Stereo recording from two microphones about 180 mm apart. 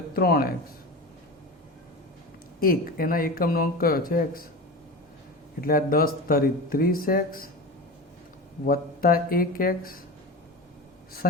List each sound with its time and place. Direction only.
0.1 s speech: 55° left (ahead or behind)
2.6 s speech: 55° left (ahead or behind)
5.5 s speech: 55° left (ahead or behind)
8.6 s speech: 55° left (ahead or behind)